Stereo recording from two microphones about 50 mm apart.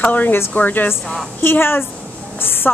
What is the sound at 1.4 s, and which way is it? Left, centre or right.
Speech, left.